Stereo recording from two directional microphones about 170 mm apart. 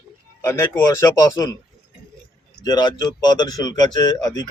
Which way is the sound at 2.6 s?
25° left (ahead or behind).